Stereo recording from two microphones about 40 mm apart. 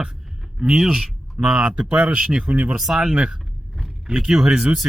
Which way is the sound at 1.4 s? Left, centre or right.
Right.